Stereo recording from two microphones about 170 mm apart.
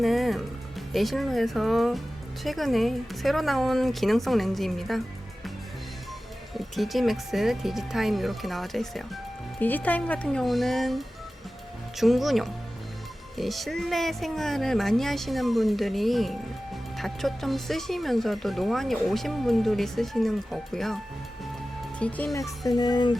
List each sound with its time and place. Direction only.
0.0 s speech: centre (ahead or behind)
6.6 s speech: centre (ahead or behind)
22.0 s speech: 5° left (ahead or behind)
22.4 s speech: 20° left (ahead or behind)